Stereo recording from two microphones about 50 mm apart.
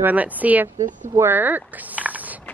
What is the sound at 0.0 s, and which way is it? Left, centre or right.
A woman's voice, right.